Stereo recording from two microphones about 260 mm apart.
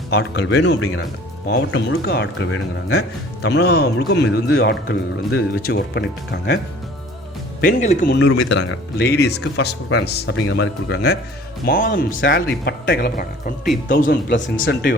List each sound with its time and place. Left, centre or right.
0.1 s speech: left
7.6 s speech: left